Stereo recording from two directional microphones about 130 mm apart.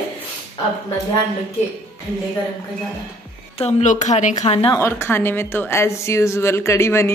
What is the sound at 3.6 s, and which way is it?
Speech, 70° left (ahead or behind).